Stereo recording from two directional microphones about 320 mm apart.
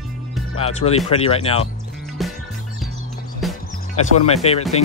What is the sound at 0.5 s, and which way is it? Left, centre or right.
Speech, centre.